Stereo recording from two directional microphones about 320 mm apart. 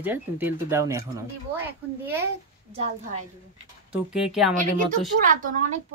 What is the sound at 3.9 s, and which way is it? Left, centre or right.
Speech, centre.